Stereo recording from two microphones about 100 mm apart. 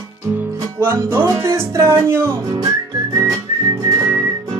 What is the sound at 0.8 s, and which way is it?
Music, 25° right (ahead or behind).